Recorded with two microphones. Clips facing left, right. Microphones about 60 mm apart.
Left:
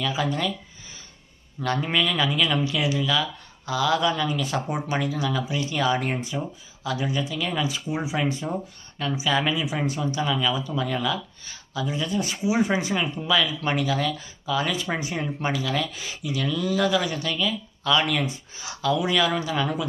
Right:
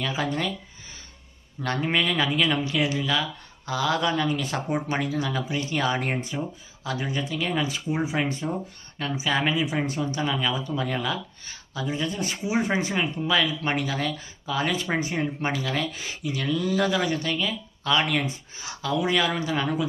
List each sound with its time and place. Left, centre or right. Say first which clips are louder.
0.0 s speech: left 1 dB; right
1.6 s speech: left 1 dB; right